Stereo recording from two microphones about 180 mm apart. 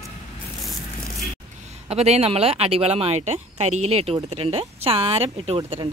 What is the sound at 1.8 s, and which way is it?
Speech, 35° right (ahead or behind).